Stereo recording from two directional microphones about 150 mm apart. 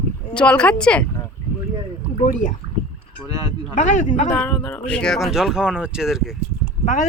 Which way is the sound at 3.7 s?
50° left (ahead or behind).